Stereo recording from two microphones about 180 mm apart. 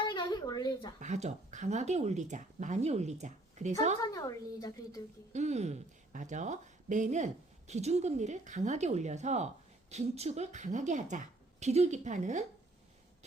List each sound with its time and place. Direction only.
0.1 s a sound: 25° left (ahead or behind)
0.9 s speech: 40° right (ahead or behind)
4.1 s a woman's voice: 20° left (ahead or behind)
5.3 s speech: 40° right (ahead or behind)